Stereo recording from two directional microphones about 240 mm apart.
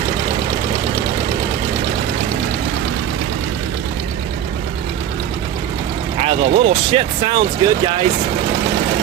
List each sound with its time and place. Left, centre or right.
6.1 s speech: right